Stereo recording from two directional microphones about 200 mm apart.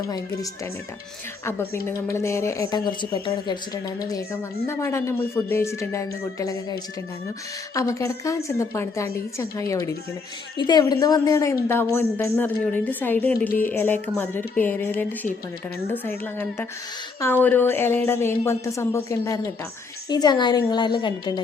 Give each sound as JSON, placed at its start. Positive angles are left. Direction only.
{"t": 1.5, "sound": "a woman's voice", "side_deg": 10}